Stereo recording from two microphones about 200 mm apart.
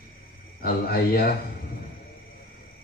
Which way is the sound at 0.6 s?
50° left (ahead or behind).